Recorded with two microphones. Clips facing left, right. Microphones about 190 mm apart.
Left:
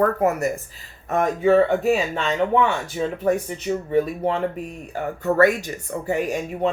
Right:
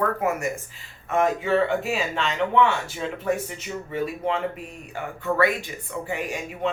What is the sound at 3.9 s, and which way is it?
Speech, 40° left (ahead or behind).